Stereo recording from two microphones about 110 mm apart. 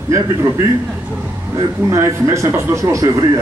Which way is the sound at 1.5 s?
25° right (ahead or behind).